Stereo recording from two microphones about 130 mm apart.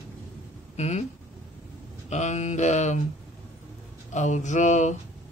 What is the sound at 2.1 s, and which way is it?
Speech, 65° left (ahead or behind).